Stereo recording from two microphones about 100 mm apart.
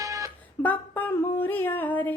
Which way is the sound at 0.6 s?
15° left (ahead or behind).